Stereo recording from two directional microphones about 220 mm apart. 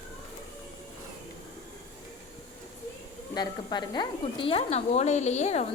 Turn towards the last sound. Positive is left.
turn(degrees=30)  # may be behind; listen again after turning